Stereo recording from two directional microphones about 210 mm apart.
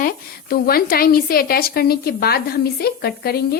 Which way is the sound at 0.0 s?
45° left (ahead or behind).